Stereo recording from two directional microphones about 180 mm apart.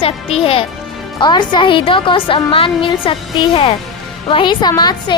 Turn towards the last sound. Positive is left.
turn(degrees=20)  # may be behind; listen again after turning